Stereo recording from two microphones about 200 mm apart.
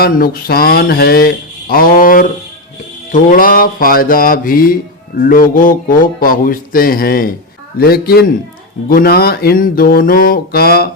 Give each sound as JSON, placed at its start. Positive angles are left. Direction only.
{"t": 0.0, "sound": "mantra", "side_deg": 50}